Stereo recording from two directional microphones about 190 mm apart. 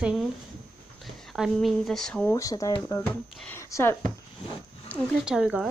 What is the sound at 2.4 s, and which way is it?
Speech, 20° left (ahead or behind).